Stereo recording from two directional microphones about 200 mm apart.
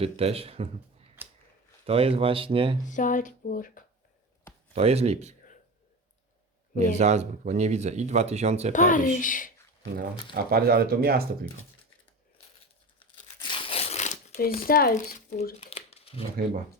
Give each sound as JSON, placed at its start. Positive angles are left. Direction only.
{"t": 0.0, "sound": "speech", "side_deg": -30}
{"t": 1.2, "sound": "a sound", "side_deg": -10}
{"t": 1.9, "sound": "speech", "side_deg": -30}
{"t": 2.9, "sound": "speech", "side_deg": 40}
{"t": 4.7, "sound": "speech", "side_deg": -30}
{"t": 6.7, "sound": "speech", "side_deg": -35}
{"t": 8.7, "sound": "speech", "side_deg": 40}
{"t": 10.3, "sound": "speech", "side_deg": -50}
{"t": 13.4, "sound": "crumpling", "side_deg": 25}
{"t": 14.7, "sound": "speech", "side_deg": 50}
{"t": 15.6, "sound": "shuffling cards", "side_deg": 30}
{"t": 16.4, "sound": "speech", "side_deg": 25}